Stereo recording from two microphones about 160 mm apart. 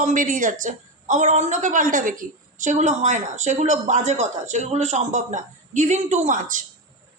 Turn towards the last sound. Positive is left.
turn(degrees=-55)  # may be behind; listen again after turning